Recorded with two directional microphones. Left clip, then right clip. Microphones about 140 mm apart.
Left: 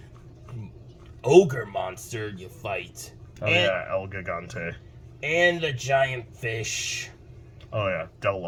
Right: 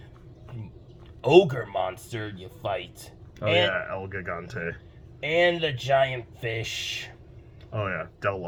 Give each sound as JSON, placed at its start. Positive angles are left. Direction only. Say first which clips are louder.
{"t": 1.2, "sound": "speech", "louder": "left 1 dB", "side_deg": -40}
{"t": 3.4, "sound": "speech", "louder": "left 1 dB", "side_deg": 15}
{"t": 5.2, "sound": "speech", "louder": "even", "side_deg": -40}
{"t": 7.7, "sound": "speech", "louder": "left 3 dB", "side_deg": 25}